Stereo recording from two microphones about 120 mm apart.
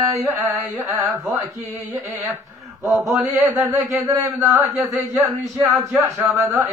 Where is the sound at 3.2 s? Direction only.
25° right (ahead or behind).